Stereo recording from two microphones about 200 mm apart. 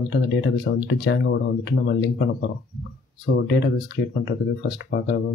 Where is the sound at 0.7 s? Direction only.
60° left (ahead or behind).